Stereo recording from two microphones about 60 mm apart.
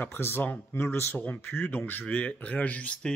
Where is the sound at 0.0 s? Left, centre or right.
Left.